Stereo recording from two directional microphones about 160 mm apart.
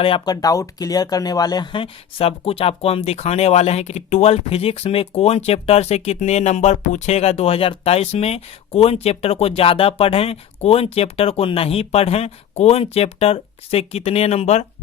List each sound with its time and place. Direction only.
0.0 s speech: 35° left (ahead or behind)
0.4 s speech: 20° left (ahead or behind); by 14.7 s 40° left (ahead or behind)